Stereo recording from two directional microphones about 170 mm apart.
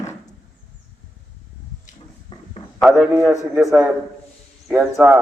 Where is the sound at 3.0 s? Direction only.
5° right (ahead or behind).